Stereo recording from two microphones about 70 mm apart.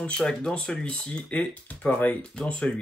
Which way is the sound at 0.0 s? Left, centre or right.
Centre.